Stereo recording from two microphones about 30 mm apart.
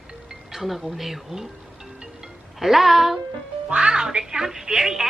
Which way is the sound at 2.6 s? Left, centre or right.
Centre.